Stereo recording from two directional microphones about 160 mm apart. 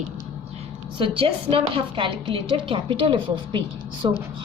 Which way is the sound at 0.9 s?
35° right (ahead or behind).